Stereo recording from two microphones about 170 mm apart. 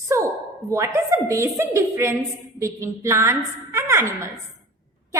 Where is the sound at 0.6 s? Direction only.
15° right (ahead or behind).